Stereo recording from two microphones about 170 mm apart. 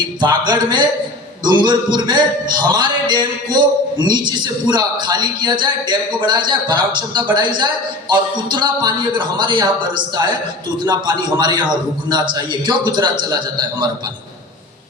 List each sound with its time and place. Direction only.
0.2 s speech: 25° right (ahead or behind)